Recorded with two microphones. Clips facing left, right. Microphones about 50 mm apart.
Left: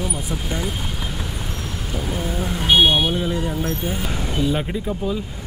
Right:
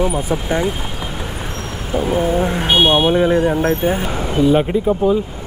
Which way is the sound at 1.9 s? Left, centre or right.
Right.